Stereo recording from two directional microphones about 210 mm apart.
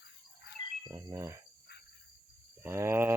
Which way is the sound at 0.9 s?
15° right (ahead or behind).